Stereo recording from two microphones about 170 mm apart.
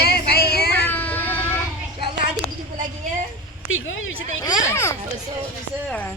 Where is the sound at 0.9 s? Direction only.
10° left (ahead or behind).